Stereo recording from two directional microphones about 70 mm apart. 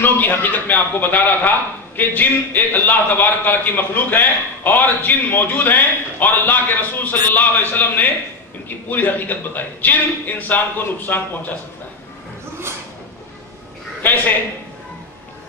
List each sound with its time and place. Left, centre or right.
0.0 s a man's voice: left